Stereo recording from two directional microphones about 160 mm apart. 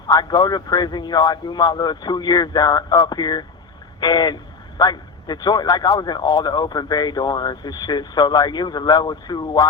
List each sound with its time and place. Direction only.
0.1 s speech: 25° left (ahead or behind)